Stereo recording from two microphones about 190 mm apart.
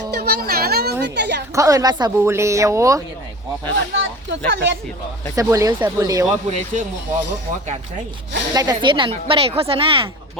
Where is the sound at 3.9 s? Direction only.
70° right (ahead or behind).